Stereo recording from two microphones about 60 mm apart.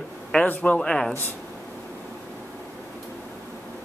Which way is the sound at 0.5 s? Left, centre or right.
Left.